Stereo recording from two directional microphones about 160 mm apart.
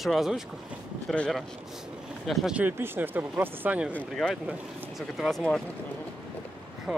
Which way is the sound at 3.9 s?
5° left (ahead or behind).